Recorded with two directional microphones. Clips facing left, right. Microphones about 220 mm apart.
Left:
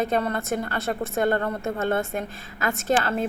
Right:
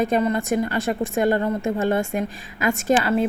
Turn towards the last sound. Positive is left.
turn(degrees=-15)  # may be behind; listen again after turning